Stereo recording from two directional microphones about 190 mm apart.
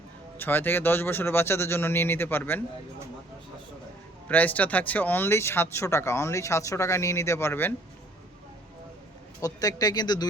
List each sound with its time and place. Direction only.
0.3 s speech: 10° left (ahead or behind)
4.3 s speech: 10° left (ahead or behind)
9.4 s speech: 20° left (ahead or behind)